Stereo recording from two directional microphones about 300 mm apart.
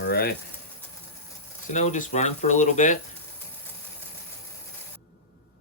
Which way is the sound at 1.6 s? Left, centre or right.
Left.